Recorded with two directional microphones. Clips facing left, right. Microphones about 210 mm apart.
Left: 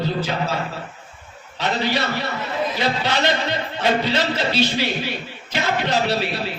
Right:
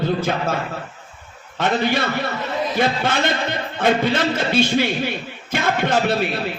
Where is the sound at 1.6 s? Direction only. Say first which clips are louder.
Right 3 dB; 50° right (ahead or behind).